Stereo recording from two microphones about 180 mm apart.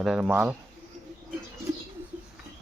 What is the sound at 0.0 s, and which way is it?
Speech, 5° right (ahead or behind).